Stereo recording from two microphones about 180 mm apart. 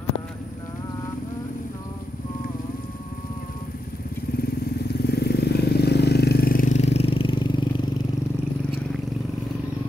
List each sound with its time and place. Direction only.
5.0 s vehicle: 65° left (ahead or behind); by 7.6 s 30° left (ahead or behind)